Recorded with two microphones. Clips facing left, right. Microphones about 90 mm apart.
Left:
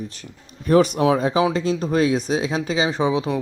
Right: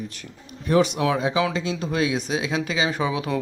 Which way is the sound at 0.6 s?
45° left (ahead or behind).